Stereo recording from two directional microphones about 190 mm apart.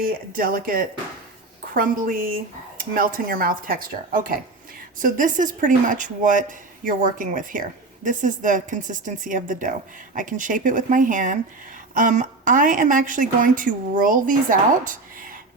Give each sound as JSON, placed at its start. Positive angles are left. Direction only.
{"t": 0.0, "sound": "a woman's voice", "side_deg": -50}